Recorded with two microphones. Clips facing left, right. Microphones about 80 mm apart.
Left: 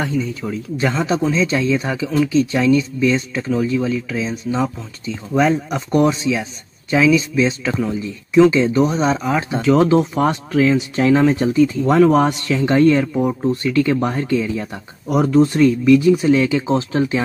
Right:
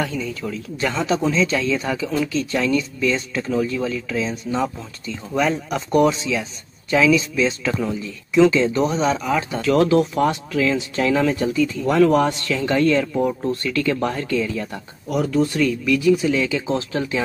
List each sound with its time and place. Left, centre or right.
0.0 s speech: left
15.0 s speech: left